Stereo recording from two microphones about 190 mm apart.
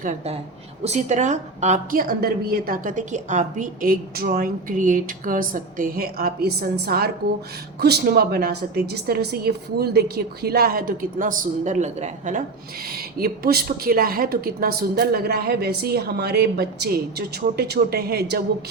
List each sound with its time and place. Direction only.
0.0 s a woman's voice: 40° right (ahead or behind)
13.1 s a woman's voice: 55° right (ahead or behind)